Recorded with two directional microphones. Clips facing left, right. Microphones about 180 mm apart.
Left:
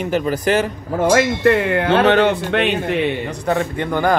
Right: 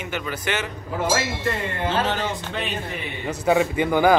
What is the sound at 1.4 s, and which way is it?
A man's voice, 70° left (ahead or behind).